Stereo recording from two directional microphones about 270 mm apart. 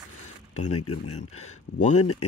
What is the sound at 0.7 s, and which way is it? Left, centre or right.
Speech, left.